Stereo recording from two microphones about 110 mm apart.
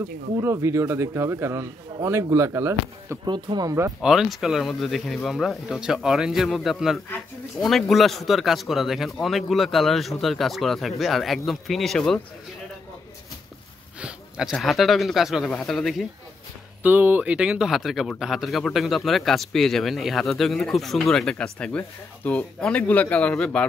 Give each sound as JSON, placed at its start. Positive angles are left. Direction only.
{"t": 0.4, "sound": "a man's voice", "side_deg": -25}
{"t": 3.3, "sound": "speech", "side_deg": -45}
{"t": 4.0, "sound": "speech", "side_deg": -5}
{"t": 14.0, "sound": "speech", "side_deg": -5}
{"t": 16.8, "sound": "speech", "side_deg": -15}